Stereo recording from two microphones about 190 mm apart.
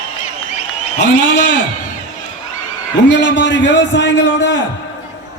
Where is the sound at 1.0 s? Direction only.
65° left (ahead or behind).